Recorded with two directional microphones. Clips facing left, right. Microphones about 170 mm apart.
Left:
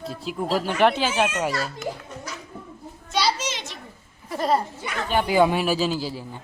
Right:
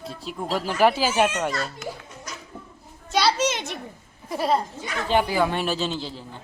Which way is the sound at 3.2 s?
60° right (ahead or behind).